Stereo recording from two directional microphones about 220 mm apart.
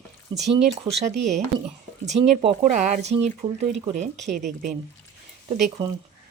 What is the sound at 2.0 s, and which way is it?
Speech, 30° right (ahead or behind).